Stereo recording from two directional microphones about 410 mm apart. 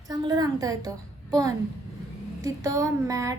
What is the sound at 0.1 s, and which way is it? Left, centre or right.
A woman's voice, centre.